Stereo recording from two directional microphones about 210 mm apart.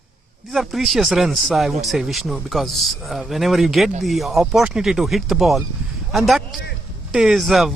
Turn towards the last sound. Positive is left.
turn(degrees=0)  # may be behind; listen again after turning